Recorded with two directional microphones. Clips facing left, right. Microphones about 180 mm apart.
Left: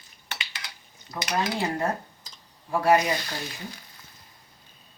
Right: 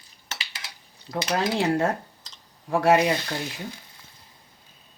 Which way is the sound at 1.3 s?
85° right.